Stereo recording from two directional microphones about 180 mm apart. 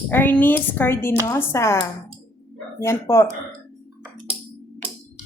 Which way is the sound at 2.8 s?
15° left (ahead or behind).